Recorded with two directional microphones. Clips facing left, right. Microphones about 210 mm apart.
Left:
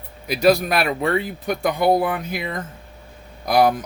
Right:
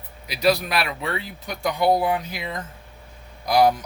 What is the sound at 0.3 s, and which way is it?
Speech, 50° left (ahead or behind).